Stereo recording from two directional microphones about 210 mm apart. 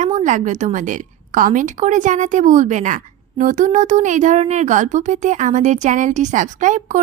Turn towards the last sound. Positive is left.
turn(degrees=-35)  # may be behind; listen again after turning